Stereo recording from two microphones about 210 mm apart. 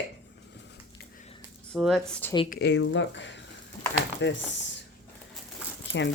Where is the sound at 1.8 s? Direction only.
Centre (ahead or behind).